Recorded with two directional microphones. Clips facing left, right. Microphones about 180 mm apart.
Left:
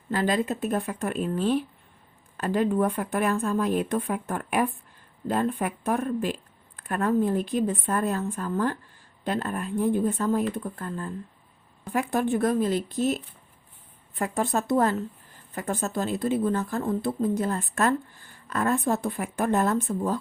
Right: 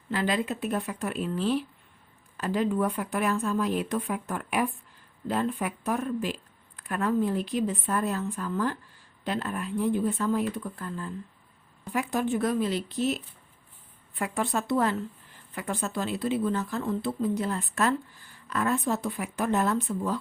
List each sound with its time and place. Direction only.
0.1 s a woman's voice: 45° left (ahead or behind)